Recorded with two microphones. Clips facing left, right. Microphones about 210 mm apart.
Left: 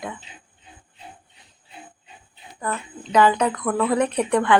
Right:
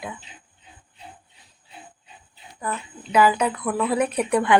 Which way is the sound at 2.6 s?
10° right (ahead or behind).